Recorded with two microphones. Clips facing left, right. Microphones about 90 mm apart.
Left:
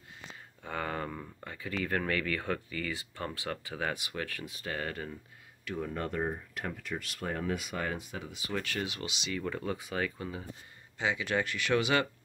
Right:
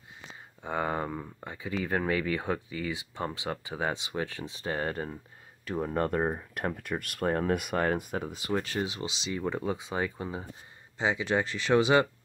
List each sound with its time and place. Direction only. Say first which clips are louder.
0.6 s speech: right 5 dB; 20° right (ahead or behind); by 8.5 s 40° right (ahead or behind)
8.5 s speech: right 3 dB; 30° right (ahead or behind)